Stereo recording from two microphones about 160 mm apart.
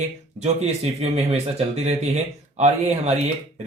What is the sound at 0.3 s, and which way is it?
A man's voice, 45° right (ahead or behind).